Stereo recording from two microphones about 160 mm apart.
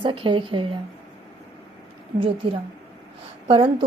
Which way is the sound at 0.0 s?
30° right (ahead or behind).